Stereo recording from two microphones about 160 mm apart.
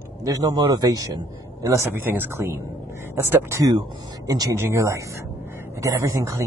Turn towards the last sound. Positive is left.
turn(degrees=-20)  # may be behind; listen again after turning